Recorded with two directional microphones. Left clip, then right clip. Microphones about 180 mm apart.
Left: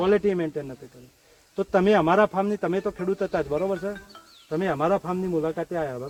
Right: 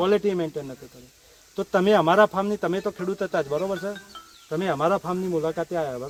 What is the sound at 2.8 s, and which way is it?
Speech, 25° left (ahead or behind).